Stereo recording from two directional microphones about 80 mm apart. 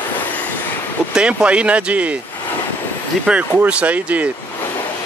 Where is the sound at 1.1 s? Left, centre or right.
Centre.